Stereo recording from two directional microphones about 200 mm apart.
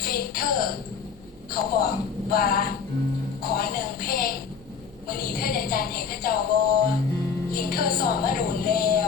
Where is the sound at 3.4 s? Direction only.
45° left (ahead or behind).